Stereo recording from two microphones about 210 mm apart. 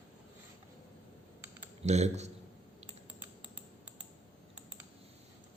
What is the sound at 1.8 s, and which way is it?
Speech, 30° right (ahead or behind).